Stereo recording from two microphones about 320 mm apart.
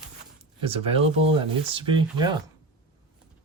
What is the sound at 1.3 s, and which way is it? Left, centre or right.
Speech, centre.